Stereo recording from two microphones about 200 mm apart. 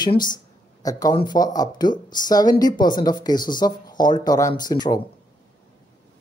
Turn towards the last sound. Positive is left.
turn(degrees=20)  # may be behind; listen again after turning